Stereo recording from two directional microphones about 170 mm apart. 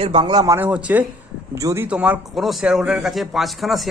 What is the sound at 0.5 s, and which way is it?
A man's voice, 10° right (ahead or behind).